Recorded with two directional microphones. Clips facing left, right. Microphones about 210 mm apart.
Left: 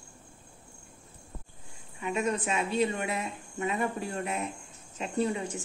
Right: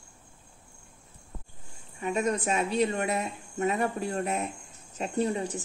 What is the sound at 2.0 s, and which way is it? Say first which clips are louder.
A woman's voice: right 2 dB; 40° right (ahead or behind).